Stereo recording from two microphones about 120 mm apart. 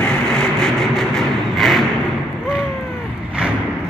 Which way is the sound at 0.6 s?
5° left (ahead or behind).